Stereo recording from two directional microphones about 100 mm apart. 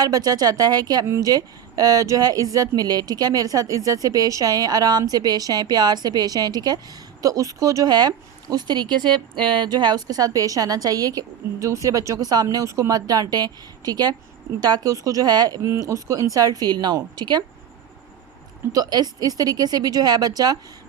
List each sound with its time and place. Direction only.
0.0 s speech: 40° right (ahead or behind)
1.0 s speech: 25° right (ahead or behind)
1.3 s speech: 40° right (ahead or behind)
18.7 s speech: 40° right (ahead or behind)